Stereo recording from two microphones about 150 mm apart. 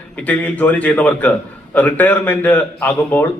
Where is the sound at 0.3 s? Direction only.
10° left (ahead or behind).